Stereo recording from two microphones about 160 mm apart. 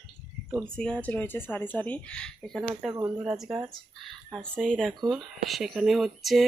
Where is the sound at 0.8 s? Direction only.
5° left (ahead or behind).